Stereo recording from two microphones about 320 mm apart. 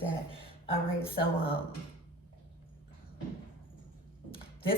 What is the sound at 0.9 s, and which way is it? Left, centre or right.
Speech, centre.